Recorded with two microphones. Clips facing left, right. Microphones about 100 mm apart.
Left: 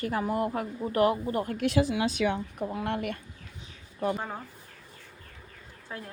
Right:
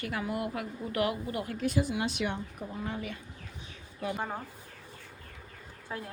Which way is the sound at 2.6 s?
80° left.